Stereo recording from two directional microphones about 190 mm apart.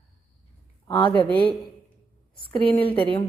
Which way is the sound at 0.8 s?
20° left (ahead or behind).